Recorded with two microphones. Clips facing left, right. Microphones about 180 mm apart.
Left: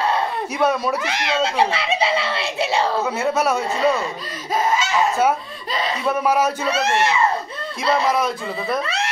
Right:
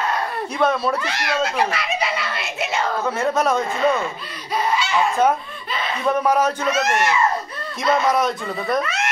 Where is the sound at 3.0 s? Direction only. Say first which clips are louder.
Even; 10° left (ahead or behind).